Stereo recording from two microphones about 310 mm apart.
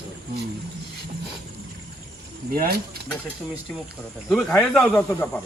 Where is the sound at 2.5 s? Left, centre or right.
Right.